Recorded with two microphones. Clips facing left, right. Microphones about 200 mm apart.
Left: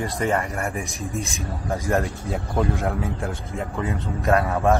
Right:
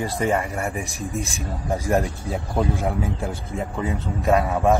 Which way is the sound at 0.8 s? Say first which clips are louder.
Right 1 dB; 35° right (ahead or behind).